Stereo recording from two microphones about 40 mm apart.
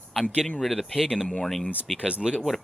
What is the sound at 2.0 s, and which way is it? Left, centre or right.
Speech, right.